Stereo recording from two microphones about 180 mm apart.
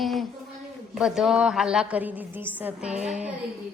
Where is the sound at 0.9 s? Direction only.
Centre (ahead or behind).